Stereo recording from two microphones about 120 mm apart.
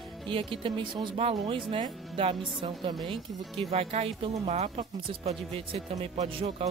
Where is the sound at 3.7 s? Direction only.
60° right (ahead or behind).